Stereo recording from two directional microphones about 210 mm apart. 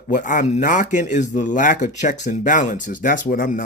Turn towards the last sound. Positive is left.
turn(degrees=40)  # may be behind; listen again after turning